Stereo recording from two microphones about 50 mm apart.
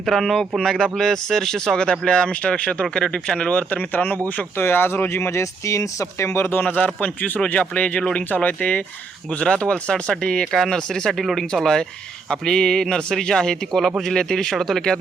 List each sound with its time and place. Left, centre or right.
0.0 s speech: centre; by 3.8 s left
3.9 s a man's voice: left
4.6 s speech: left
5.4 s speech: left
6.6 s a man's voice: left
7.4 s speech: left
9.4 s speech: centre
11.2 s speech: centre